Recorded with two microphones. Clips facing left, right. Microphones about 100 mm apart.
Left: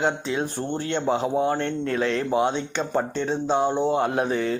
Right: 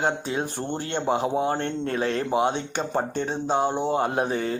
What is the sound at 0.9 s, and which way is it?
Speech, 50° right (ahead or behind).